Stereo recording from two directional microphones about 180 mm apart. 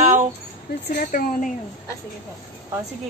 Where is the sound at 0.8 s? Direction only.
55° left (ahead or behind).